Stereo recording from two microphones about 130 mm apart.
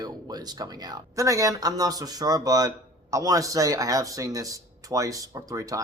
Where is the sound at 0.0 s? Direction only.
30° right (ahead or behind).